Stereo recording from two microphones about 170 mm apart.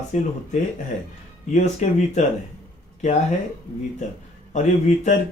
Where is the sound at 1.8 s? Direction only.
45° left (ahead or behind).